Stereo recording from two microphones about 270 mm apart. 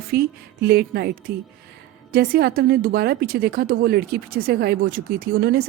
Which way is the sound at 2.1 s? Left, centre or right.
Right.